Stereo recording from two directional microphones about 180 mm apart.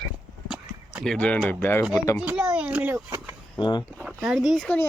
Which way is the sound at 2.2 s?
10° right (ahead or behind).